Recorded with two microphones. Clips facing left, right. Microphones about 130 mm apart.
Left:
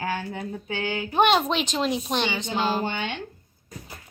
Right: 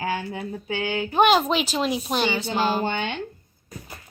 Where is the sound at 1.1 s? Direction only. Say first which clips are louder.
Right 2 dB; centre (ahead or behind).